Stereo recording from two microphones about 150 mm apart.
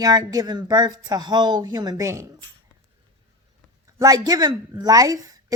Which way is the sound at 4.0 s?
25° right (ahead or behind).